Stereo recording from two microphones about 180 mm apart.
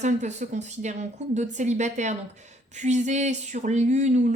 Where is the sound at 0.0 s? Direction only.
40° right (ahead or behind).